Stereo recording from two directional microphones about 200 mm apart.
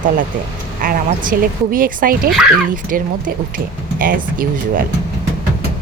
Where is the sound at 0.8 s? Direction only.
45° right (ahead or behind).